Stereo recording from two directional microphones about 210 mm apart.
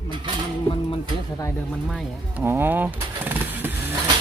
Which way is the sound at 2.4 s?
10° right (ahead or behind).